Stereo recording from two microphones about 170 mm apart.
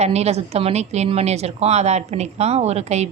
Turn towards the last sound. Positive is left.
turn(degrees=-40)  # may be behind; listen again after turning